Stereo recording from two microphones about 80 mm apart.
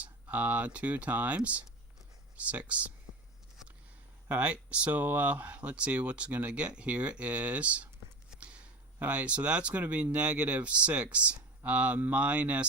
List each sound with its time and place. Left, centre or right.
0.0 s speech: right
4.3 s speech: centre